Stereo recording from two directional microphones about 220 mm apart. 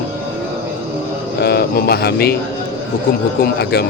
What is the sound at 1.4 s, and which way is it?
Speech, 45° left (ahead or behind).